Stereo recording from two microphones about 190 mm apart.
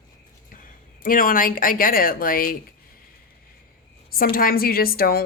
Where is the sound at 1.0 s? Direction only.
45° left (ahead or behind).